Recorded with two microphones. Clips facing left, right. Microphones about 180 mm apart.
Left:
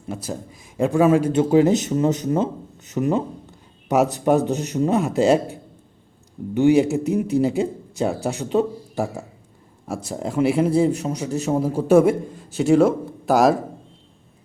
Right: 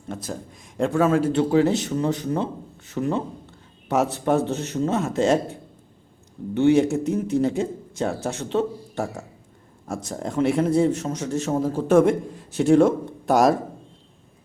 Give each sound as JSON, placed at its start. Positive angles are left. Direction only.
{"t": 0.1, "sound": "a man's voice", "side_deg": 5}